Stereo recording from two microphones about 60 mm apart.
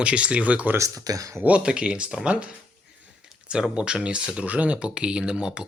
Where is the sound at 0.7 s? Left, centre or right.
Right.